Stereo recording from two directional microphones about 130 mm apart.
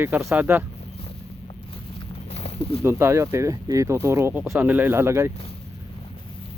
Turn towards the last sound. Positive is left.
turn(degrees=-20)  # may be behind; listen again after turning